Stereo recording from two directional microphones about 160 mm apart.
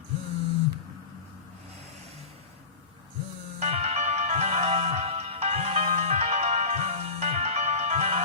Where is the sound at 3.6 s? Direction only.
40° right (ahead or behind).